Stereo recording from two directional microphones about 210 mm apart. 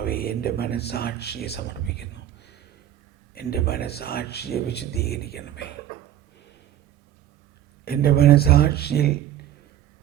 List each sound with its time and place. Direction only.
0.0 s speech: 45° left (ahead or behind)
7.9 s speech: 45° left (ahead or behind)